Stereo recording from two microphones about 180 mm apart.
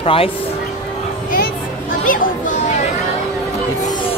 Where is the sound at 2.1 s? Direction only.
45° left (ahead or behind).